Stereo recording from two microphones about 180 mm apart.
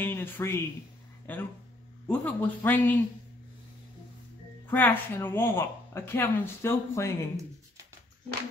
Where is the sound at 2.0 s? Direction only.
5° left (ahead or behind).